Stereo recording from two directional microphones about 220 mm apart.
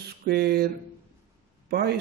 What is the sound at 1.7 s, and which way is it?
Speech, 45° right (ahead or behind).